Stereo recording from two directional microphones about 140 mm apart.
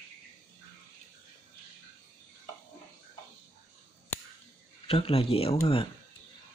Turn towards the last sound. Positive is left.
turn(degrees=40)  # may be behind; listen again after turning